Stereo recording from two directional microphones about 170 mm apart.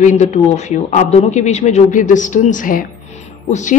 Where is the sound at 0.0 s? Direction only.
45° left (ahead or behind).